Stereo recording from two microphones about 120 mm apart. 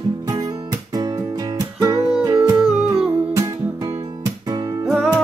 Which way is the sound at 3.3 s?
25° right (ahead or behind).